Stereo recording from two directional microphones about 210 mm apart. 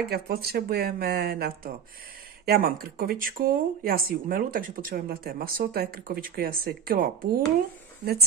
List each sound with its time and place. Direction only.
0.1 s speech: 45° right (ahead or behind)